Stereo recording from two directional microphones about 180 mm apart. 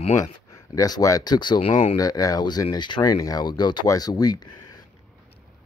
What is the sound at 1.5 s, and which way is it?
Speech, 40° left (ahead or behind).